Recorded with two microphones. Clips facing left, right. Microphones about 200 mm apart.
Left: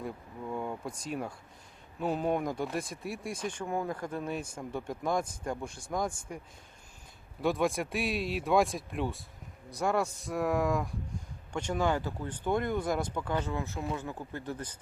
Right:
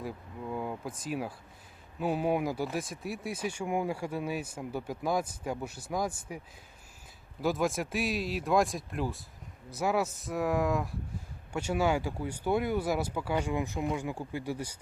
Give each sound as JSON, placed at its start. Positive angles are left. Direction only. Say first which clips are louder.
{"t": 0.0, "sound": "speech", "louder": "even", "side_deg": -5}
{"t": 7.4, "sound": "speech", "louder": "even", "side_deg": 0}